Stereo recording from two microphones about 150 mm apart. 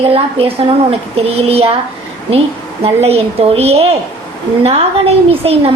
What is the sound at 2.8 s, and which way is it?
A woman's voice, 40° right (ahead or behind).